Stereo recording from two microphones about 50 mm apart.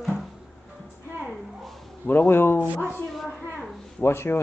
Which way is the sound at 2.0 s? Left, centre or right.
Left.